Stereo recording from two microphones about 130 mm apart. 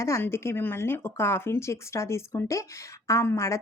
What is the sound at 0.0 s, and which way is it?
Speech, 20° left (ahead or behind).